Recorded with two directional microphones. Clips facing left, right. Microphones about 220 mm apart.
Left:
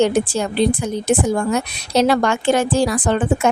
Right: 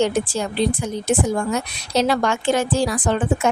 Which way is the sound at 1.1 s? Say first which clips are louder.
Left 3 dB; 60° left (ahead or behind).